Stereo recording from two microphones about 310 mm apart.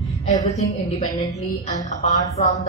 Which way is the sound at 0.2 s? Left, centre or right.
Left.